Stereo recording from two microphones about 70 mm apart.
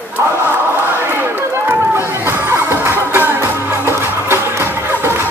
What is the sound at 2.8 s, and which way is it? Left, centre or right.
Music, right.